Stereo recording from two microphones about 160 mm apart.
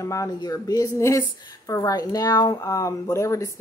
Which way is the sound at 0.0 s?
20° left (ahead or behind).